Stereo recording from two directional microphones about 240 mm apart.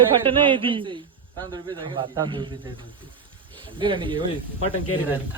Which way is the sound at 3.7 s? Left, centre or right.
Centre.